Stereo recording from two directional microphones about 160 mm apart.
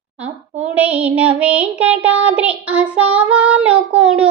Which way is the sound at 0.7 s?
10° right (ahead or behind).